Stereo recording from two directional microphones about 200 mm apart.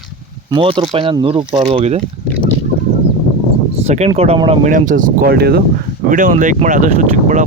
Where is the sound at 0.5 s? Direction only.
25° right (ahead or behind).